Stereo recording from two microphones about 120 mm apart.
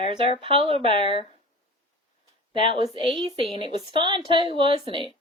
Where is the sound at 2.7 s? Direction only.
60° left (ahead or behind).